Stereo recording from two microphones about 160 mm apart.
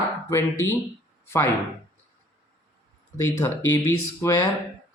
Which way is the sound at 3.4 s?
15° left (ahead or behind).